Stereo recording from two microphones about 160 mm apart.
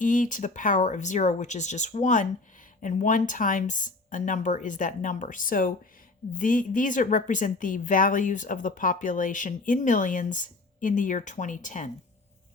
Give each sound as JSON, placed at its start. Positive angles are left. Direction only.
{"t": 0.0, "sound": "speech", "side_deg": 55}